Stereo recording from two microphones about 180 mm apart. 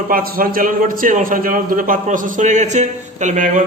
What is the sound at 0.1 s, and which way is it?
A man's voice, 50° right (ahead or behind).